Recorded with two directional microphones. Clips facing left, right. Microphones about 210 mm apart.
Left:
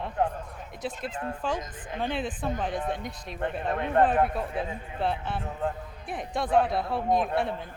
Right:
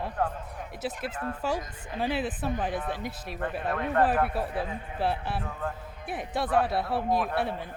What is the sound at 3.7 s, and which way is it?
Speech, 25° left (ahead or behind).